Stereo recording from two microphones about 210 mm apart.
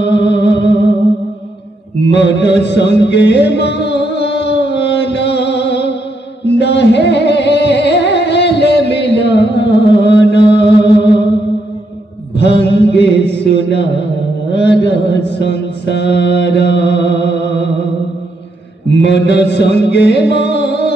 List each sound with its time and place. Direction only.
0.0 s music: 55° left (ahead or behind)
2.0 s mantra: 55° left (ahead or behind)
2.6 s music: 55° left (ahead or behind)
12.4 s a sound: 55° left (ahead or behind)
14.5 s mantra: 55° left (ahead or behind)
18.9 s music: 55° left (ahead or behind)